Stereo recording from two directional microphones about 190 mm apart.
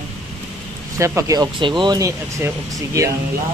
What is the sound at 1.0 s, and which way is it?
Speech, 15° right (ahead or behind).